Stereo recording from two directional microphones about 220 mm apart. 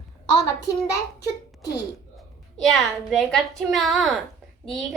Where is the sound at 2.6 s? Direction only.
Centre (ahead or behind).